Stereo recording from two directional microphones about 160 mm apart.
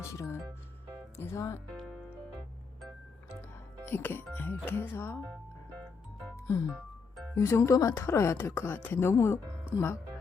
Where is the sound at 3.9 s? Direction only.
15° left (ahead or behind).